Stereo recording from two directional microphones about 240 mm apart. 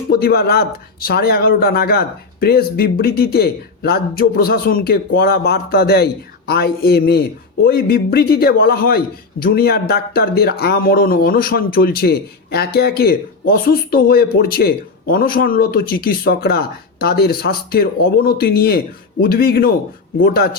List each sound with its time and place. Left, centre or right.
0.1 s speech: left